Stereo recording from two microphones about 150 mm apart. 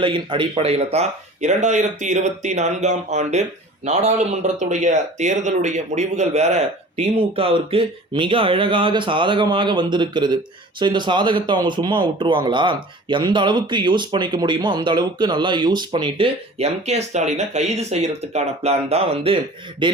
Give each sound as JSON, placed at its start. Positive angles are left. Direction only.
{"t": 0.0, "sound": "speech", "side_deg": -35}